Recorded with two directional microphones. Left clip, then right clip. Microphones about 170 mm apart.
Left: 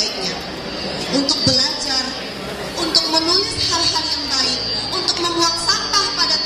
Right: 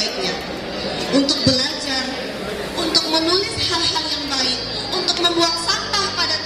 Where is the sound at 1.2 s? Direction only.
35° right (ahead or behind).